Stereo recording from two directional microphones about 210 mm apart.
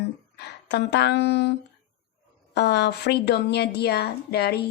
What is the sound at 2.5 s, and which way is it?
A woman's voice, 55° left (ahead or behind).